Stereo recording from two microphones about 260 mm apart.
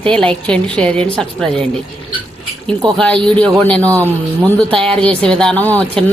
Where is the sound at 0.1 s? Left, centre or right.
Centre.